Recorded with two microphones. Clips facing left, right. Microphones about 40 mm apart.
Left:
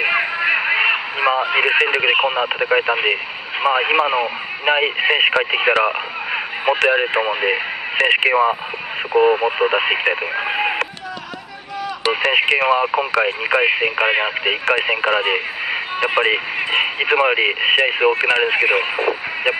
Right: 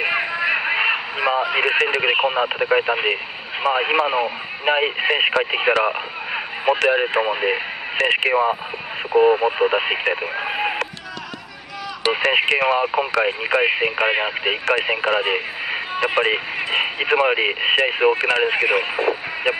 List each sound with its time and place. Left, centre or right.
0.0 s a sound: left
0.9 s radio: left
1.5 s speech: left
12.5 s speech: centre